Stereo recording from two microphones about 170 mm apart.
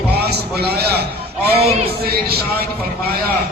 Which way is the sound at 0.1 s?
70° right (ahead or behind).